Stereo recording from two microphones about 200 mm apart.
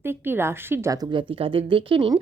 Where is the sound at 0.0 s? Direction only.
10° right (ahead or behind).